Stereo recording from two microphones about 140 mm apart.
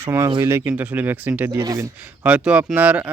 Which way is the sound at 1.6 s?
25° right (ahead or behind).